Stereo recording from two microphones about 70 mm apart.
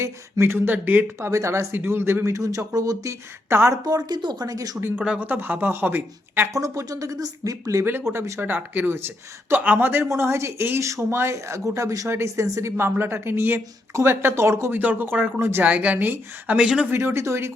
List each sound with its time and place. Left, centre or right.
0.0 s a woman's voice: right
1.3 s speech: right
1.7 s a woman's voice: right
4.1 s speech: right
5.2 s speech: right
6.5 s a woman's voice: right
10.1 s speech: right
12.0 s a woman's voice: right
14.8 s a woman's voice: right
15.6 s speech: right
16.6 s speech: centre
16.9 s a woman's voice: right